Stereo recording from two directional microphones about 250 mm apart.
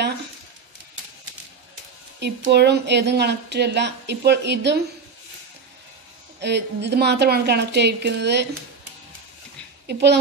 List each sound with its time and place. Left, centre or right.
2.1 s speech: right
6.4 s speech: right
9.8 s speech: right